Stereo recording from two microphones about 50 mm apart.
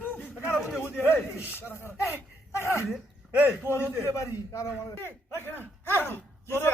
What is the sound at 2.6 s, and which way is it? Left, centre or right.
A man's voice, left.